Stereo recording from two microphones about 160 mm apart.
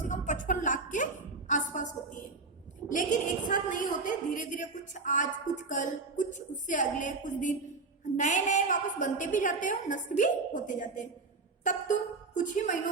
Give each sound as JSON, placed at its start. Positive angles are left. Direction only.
{"t": 0.0, "sound": "music", "side_deg": 50}
{"t": 1.5, "sound": "a woman's voice", "side_deg": 55}